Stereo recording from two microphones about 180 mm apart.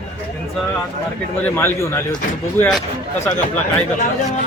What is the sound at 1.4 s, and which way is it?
Speech, 15° left (ahead or behind).